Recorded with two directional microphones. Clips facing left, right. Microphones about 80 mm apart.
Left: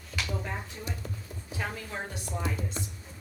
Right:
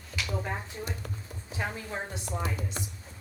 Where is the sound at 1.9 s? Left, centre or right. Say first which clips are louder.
Right 1 dB; centre.